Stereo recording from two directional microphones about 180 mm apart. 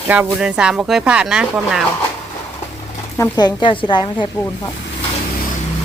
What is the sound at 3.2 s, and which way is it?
Speech, 20° left (ahead or behind).